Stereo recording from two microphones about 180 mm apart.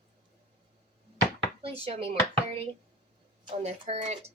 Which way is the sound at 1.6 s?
35° right (ahead or behind).